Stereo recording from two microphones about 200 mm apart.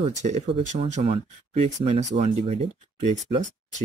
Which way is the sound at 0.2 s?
35° right (ahead or behind).